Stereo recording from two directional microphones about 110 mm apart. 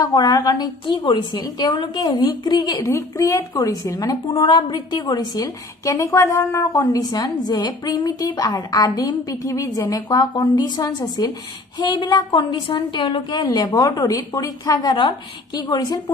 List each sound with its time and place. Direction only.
0.0 s a woman's voice: 35° left (ahead or behind)
2.8 s a woman's voice: 25° left (ahead or behind)
12.3 s a woman's voice: 50° left (ahead or behind)